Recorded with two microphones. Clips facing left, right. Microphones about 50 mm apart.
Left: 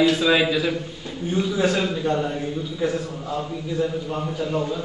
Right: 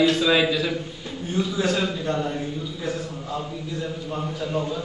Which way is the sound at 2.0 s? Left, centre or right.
Centre.